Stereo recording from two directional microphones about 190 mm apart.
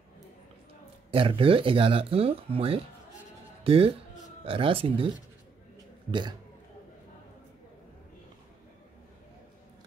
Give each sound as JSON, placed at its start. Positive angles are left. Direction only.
{"t": 1.1, "sound": "speech", "side_deg": -30}